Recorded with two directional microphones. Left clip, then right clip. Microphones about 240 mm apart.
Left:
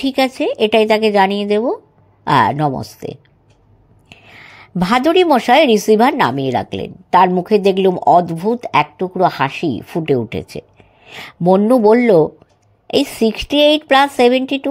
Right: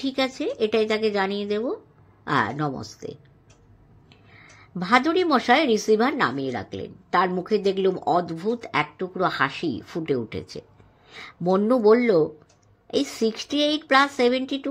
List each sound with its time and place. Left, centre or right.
0.0 s a woman's voice: left